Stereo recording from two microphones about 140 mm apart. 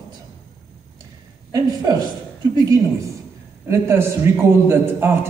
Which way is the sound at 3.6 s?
20° right (ahead or behind).